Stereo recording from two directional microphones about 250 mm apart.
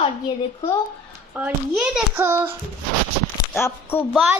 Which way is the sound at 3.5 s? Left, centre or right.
Centre.